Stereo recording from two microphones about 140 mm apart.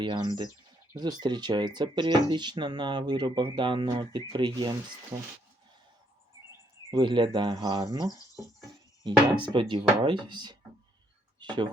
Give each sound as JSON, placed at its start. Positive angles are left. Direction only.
{"t": 0.0, "sound": "speech", "side_deg": -30}
{"t": 6.9, "sound": "speech", "side_deg": -35}
{"t": 11.3, "sound": "a sound", "side_deg": -30}